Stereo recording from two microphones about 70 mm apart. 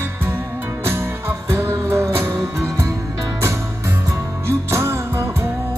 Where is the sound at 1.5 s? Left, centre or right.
Right.